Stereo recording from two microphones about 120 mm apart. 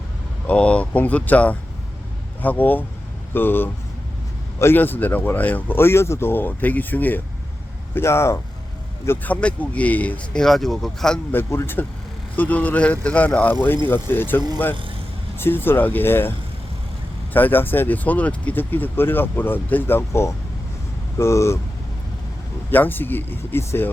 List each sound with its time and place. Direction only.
0.4 s speech: 10° left (ahead or behind)
11.3 s speech: 20° left (ahead or behind)
17.3 s speech: 15° left (ahead or behind)
22.7 s speech: 15° left (ahead or behind)